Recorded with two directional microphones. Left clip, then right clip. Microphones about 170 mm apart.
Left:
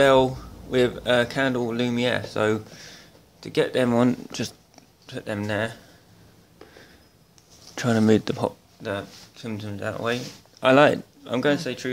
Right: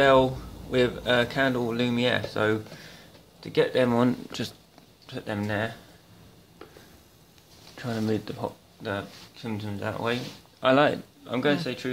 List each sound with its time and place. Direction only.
0.0 s speech: 20° left (ahead or behind)
7.7 s speech: 50° left (ahead or behind)
8.8 s speech: 20° left (ahead or behind)